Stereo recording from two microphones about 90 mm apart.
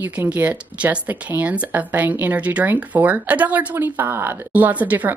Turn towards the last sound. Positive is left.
turn(degrees=-20)  # may be behind; listen again after turning